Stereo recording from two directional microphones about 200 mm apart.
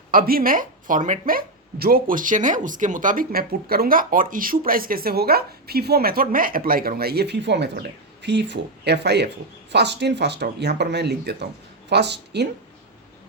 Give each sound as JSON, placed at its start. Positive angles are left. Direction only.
{"t": 0.1, "sound": "speech", "side_deg": -45}